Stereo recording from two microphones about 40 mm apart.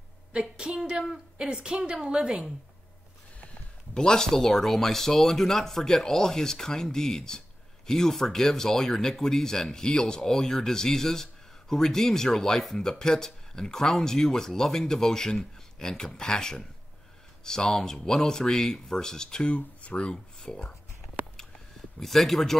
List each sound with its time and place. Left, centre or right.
0.3 s a woman's voice: right
3.9 s speech: centre
19.4 s speech: left
22.0 s speech: centre